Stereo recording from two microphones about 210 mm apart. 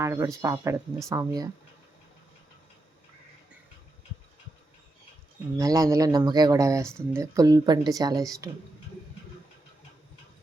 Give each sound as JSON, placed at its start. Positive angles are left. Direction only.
{"t": 0.0, "sound": "speech", "side_deg": -15}
{"t": 5.5, "sound": "speech", "side_deg": -15}